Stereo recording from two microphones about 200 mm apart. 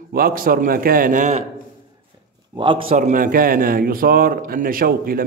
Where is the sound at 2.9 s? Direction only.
45° right (ahead or behind).